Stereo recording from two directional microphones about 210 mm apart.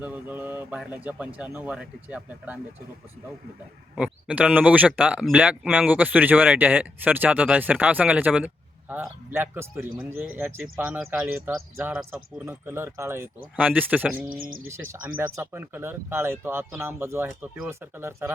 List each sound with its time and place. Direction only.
0.0 s speech: 10° right (ahead or behind)
3.9 s speech: 5° right (ahead or behind)
14.3 s speech: 40° right (ahead or behind)
15.0 s speech: 10° right (ahead or behind)